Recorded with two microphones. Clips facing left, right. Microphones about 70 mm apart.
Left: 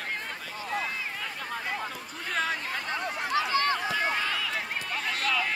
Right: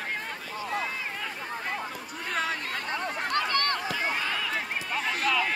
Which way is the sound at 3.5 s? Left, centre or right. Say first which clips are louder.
Left 1 dB; right.